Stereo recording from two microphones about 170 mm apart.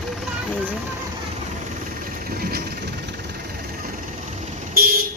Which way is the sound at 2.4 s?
65° right (ahead or behind).